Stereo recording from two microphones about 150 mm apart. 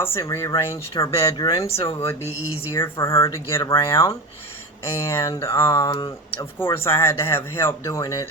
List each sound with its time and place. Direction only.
0.0 s speech: 20° left (ahead or behind)
6.7 s speech: 15° left (ahead or behind)